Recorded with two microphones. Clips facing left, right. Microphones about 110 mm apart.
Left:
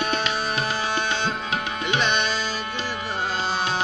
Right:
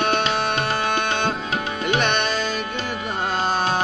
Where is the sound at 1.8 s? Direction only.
55° right (ahead or behind).